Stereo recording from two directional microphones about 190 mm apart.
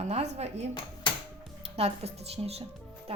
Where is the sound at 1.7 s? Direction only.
30° right (ahead or behind).